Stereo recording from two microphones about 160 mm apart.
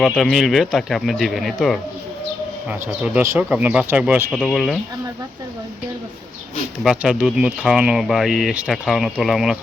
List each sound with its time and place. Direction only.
0.0 s speech: centre (ahead or behind)
6.8 s speech: 5° right (ahead or behind)